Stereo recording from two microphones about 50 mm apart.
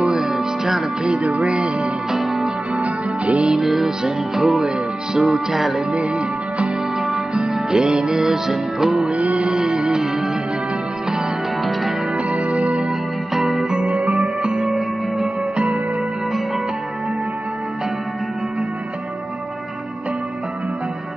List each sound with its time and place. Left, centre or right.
0.2 s music: centre
1.2 s music: right
2.1 s music: centre
2.8 s music: right
3.5 s music: centre
5.9 s speech: right
7.0 s music: centre
7.7 s music: centre
9.1 s music: right
9.5 s music: centre
11.1 s music: centre
11.6 s music: centre
16.3 s music: centre